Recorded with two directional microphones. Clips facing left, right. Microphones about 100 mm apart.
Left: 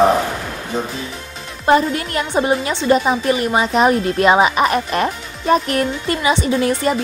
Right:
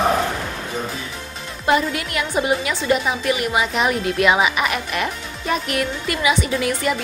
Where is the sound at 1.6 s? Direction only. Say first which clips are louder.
Left 4 dB; 35° left (ahead or behind).